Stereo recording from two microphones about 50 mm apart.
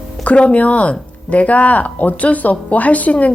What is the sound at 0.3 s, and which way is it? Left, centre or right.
A woman's voice, left.